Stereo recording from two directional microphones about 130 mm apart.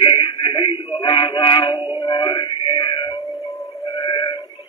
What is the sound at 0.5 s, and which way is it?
Male singing, 40° left (ahead or behind).